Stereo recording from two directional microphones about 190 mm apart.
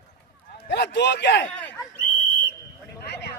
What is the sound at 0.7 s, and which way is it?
Speech, 65° left (ahead or behind).